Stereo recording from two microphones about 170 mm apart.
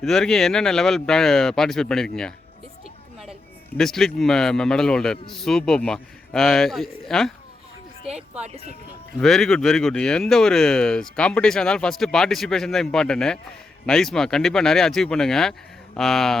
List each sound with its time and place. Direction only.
0.0 s speech: centre (ahead or behind)
3.8 s speech: centre (ahead or behind)